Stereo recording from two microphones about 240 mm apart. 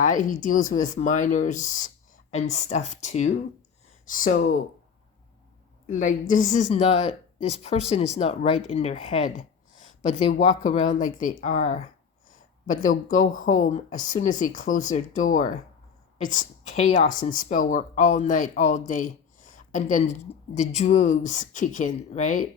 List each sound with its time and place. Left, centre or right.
0.0 s speech: left
5.9 s speech: left
10.4 s speech: left
18.9 s a sound: left
20.6 s speech: left